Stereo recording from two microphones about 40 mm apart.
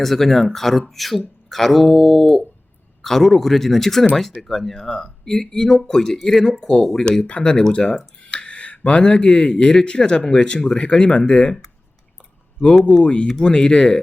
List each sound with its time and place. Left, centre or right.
0.0 s speech: centre
3.0 s speech: centre
4.8 s speech: centre
7.3 s speech: left
7.7 s speech: left
13.0 s speech: left